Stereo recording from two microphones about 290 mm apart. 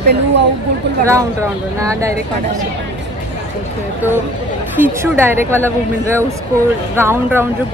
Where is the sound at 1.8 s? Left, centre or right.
Centre.